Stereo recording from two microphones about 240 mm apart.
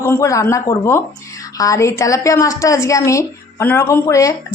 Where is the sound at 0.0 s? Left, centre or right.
Centre.